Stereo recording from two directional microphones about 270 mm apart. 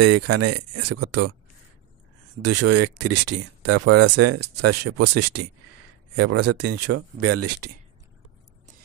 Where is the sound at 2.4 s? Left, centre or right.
Right.